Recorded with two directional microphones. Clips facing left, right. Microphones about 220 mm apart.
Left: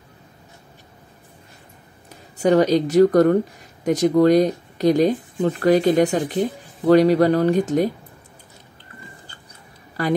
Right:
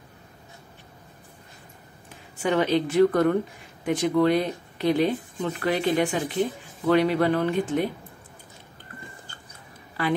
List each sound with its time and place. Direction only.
2.0 s speech: 40° left (ahead or behind)
10.0 s speech: 40° left (ahead or behind)